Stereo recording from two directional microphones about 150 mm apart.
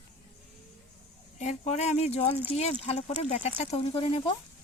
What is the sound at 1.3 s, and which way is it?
Speech, 50° left (ahead or behind).